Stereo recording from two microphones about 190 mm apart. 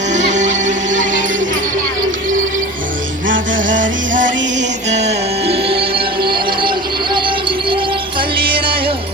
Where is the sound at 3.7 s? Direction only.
80° right.